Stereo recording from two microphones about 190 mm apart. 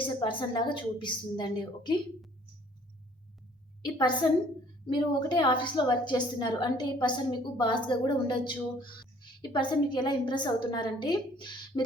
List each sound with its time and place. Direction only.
0.2 s a woman's voice: 25° left (ahead or behind)
3.8 s a woman's voice: 25° left (ahead or behind)